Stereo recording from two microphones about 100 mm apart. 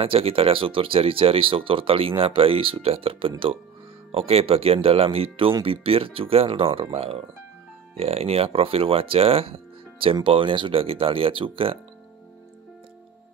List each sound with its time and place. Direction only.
0.0 s speech: 70° right (ahead or behind)
4.1 s speech: 80° right
8.0 s speech: 90° right; by 10.1 s 70° right (ahead or behind)
10.2 s speech: 55° right (ahead or behind)